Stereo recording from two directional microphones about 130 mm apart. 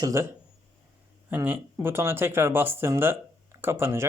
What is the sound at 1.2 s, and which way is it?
Speech, 15° right (ahead or behind).